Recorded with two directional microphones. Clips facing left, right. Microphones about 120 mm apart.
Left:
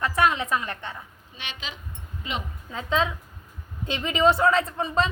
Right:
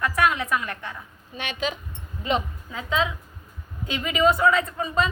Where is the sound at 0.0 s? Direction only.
25° left (ahead or behind).